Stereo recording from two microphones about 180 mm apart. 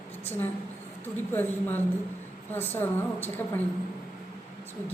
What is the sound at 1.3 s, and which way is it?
A woman's voice, 10° left (ahead or behind).